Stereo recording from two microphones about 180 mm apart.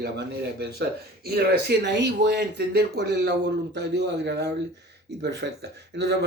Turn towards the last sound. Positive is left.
turn(degrees=-70)  # may be behind; listen again after turning